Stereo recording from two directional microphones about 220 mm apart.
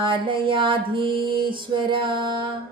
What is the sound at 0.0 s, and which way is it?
A woman's voice, 25° right (ahead or behind).